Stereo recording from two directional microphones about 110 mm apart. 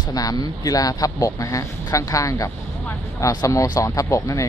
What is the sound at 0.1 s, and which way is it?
Speech, 35° left (ahead or behind).